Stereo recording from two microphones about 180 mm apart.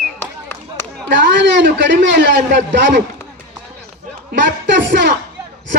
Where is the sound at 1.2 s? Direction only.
75° right (ahead or behind).